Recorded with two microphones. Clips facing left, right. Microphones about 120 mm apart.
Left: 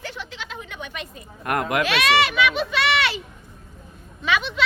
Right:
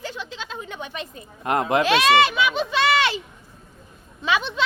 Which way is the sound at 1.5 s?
25° right (ahead or behind).